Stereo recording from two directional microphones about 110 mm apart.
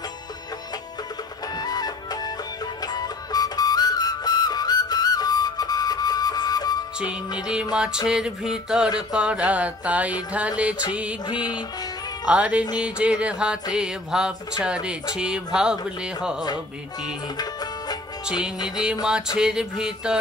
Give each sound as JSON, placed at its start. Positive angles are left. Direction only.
{"t": 1.6, "sound": "music", "side_deg": 35}
{"t": 7.0, "sound": "speech", "side_deg": -10}
{"t": 8.1, "sound": "music", "side_deg": -5}
{"t": 9.1, "sound": "speech", "side_deg": -10}
{"t": 12.3, "sound": "speech", "side_deg": -10}
{"t": 13.7, "sound": "music", "side_deg": -5}
{"t": 14.6, "sound": "speech", "side_deg": -10}
{"t": 17.4, "sound": "music", "side_deg": 35}
{"t": 19.3, "sound": "speech", "side_deg": -5}